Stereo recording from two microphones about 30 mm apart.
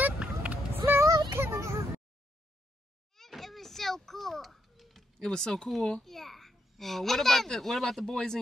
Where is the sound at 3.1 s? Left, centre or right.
Centre.